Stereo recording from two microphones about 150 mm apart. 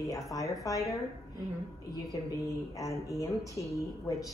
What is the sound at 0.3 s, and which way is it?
Speech, 20° left (ahead or behind).